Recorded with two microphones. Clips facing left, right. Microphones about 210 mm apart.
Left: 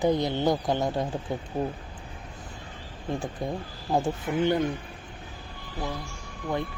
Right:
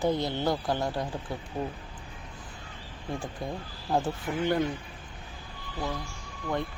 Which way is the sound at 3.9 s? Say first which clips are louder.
Left 2 dB; 15° left (ahead or behind).